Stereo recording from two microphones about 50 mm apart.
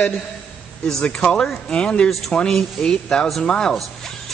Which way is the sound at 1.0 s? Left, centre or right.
Left.